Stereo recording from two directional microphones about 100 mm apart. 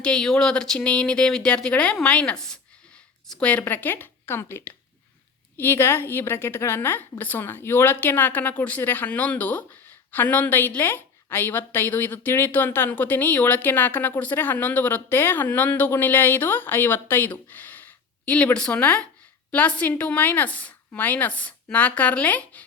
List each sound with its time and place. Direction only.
0.0 s a woman's voice: 10° left (ahead or behind)